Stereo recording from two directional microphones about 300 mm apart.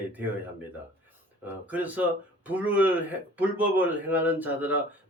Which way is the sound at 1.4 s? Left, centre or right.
Centre.